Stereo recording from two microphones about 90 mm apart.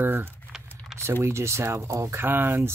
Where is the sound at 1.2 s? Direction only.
30° right (ahead or behind).